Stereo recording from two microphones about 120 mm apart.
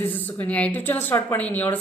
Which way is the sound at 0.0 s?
15° left (ahead or behind).